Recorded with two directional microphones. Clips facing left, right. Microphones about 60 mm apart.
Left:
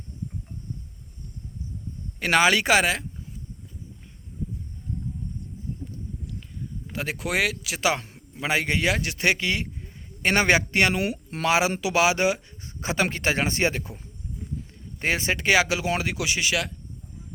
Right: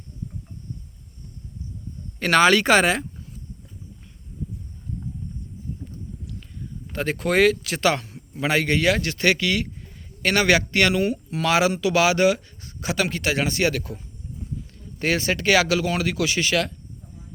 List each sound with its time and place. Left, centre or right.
2.1 s speech: centre
6.9 s speech: centre